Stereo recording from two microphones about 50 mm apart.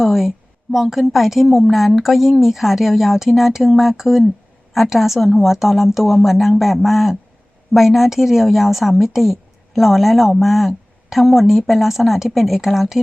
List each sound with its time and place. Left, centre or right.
0.0 s a woman's voice: centre